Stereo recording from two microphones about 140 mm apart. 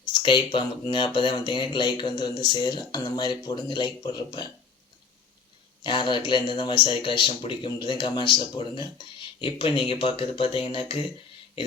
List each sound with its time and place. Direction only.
0.1 s speech: 35° left (ahead or behind)
5.8 s speech: 35° left (ahead or behind)